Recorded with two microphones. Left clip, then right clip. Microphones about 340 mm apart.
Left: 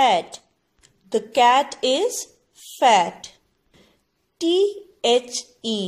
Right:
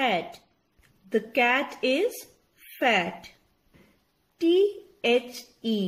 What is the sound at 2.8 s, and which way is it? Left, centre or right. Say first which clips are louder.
Speech: left 8 dB; left.